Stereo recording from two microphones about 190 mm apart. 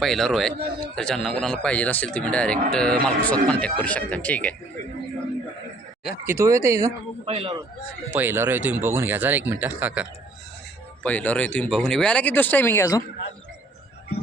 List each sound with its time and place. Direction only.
0.0 s a man's voice: centre (ahead or behind)
6.2 s speech: 15° right (ahead or behind)
7.3 s speech: 30° right (ahead or behind)
8.1 s speech: 10° right (ahead or behind)
11.0 s speech: 10° left (ahead or behind)